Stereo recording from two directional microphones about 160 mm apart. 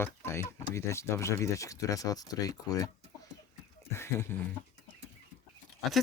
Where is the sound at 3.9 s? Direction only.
15° left (ahead or behind).